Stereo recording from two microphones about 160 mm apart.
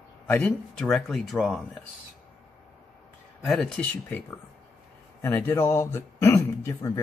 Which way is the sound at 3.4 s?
Centre (ahead or behind).